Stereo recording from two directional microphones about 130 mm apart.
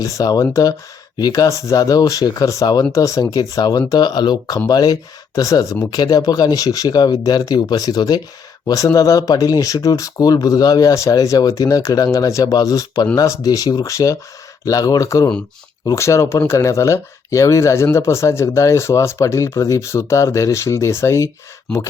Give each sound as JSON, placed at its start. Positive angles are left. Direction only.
{"t": 0.0, "sound": "speech", "side_deg": 25}